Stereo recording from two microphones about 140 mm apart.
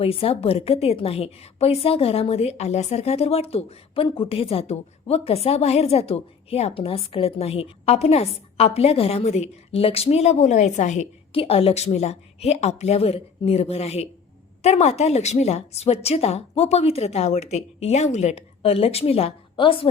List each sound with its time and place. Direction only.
0.0 s a woman's voice: 45° left (ahead or behind)
11.3 s a woman's voice: 45° left (ahead or behind)